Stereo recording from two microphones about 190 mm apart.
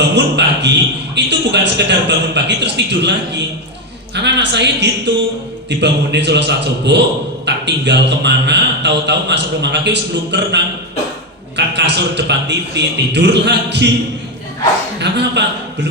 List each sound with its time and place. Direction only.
0.1 s a sound: 65° right (ahead or behind)
1.1 s a man's voice: 65° right (ahead or behind)
15.0 s a man's voice: 60° right (ahead or behind)